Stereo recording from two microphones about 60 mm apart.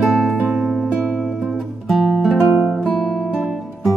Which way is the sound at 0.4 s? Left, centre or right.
Right.